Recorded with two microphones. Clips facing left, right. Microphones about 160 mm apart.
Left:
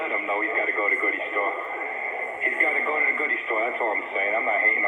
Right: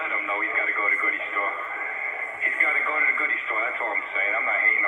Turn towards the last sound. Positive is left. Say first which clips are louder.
# left 5 dB
turn(degrees=25)  # may be behind; listen again after turning